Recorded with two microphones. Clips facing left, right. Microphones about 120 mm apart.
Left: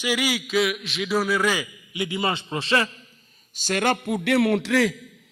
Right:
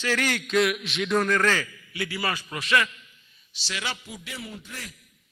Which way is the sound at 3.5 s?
50° left (ahead or behind).